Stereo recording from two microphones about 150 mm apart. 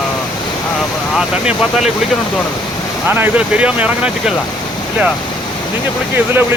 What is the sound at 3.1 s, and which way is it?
Speech, 10° right (ahead or behind).